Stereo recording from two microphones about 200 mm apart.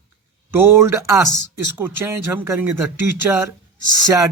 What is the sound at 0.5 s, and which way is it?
Speech, 10° right (ahead or behind).